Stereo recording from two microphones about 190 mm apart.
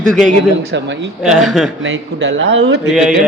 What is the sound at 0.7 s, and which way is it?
Speech, 70° right (ahead or behind).